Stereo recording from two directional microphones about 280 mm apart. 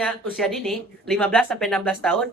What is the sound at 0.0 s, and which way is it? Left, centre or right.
Speech, centre.